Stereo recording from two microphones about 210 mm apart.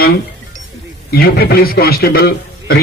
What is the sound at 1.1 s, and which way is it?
A man's voice, 50° left (ahead or behind).